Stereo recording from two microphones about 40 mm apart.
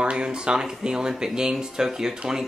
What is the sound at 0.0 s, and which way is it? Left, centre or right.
Speech, right.